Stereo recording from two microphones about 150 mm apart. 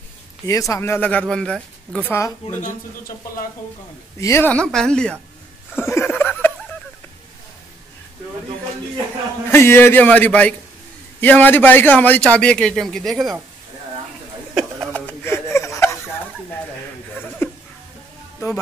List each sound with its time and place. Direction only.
0.5 s a man's voice: 20° left (ahead or behind); by 2.0 s 5° left (ahead or behind)
2.0 s a man's voice: 15° left (ahead or behind)
4.2 s a man's voice: 15° left (ahead or behind)
5.8 s laughter: 15° left (ahead or behind)
9.5 s a man's voice: 15° left (ahead or behind); by 13.4 s centre (ahead or behind)
15.0 s laughter: 15° left (ahead or behind)
17.4 s music: 15° left (ahead or behind)